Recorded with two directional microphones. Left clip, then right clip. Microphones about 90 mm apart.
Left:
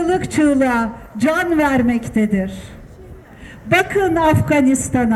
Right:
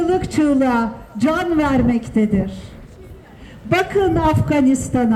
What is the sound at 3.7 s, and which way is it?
A man's voice, 35° left (ahead or behind).